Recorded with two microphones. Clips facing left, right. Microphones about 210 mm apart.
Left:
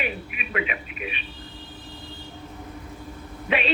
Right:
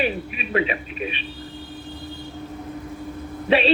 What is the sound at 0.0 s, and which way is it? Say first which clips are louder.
A man's voice: right 6 dB; 30° right (ahead or behind).